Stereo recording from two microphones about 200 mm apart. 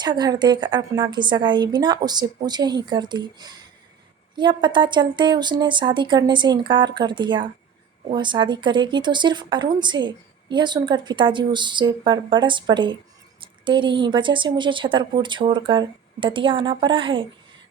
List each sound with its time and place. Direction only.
0.0 s speech: 20° right (ahead or behind)